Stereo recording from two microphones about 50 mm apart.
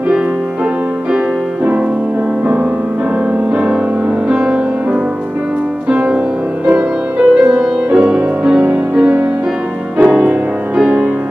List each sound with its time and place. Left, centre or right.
4.3 s music: right
6.1 s music: right